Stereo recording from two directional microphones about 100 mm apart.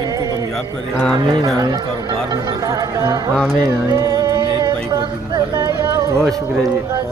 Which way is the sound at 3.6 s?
35° right (ahead or behind).